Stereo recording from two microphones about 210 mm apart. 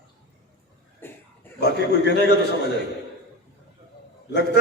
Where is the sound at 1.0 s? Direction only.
10° left (ahead or behind).